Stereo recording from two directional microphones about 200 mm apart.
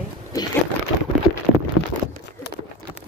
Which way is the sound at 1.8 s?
90° left.